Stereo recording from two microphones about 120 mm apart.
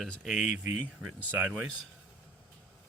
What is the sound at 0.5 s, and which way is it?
Speech, 15° right (ahead or behind).